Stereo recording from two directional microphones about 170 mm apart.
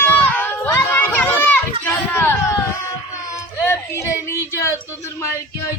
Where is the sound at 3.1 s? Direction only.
20° left (ahead or behind).